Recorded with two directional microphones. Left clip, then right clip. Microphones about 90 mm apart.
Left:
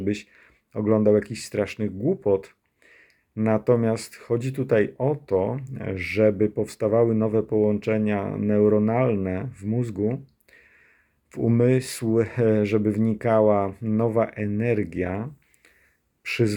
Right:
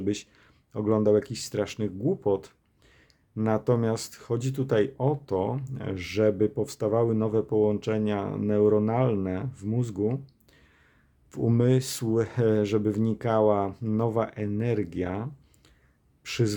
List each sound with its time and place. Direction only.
0.0 s speech: 25° right (ahead or behind)
11.6 s speech: 25° right (ahead or behind)
13.7 s speech: 40° right (ahead or behind)
13.9 s speech: 25° right (ahead or behind)